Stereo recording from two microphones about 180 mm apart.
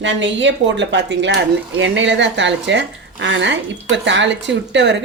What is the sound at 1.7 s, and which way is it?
A woman's voice, 90° right.